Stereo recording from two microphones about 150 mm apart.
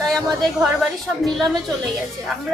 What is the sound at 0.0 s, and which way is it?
Speech, centre (ahead or behind).